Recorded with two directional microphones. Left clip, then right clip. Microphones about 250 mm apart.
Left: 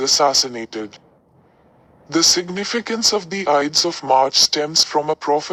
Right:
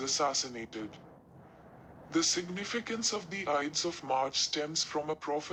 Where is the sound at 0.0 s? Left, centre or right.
Left.